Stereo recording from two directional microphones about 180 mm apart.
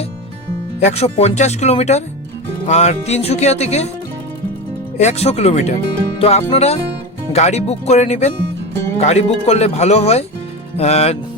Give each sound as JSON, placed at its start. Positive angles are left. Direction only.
{"t": 0.9, "sound": "speech", "side_deg": 35}
{"t": 4.9, "sound": "speech", "side_deg": 35}